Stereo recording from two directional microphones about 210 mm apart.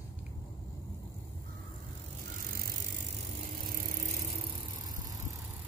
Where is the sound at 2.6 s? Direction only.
40° right (ahead or behind).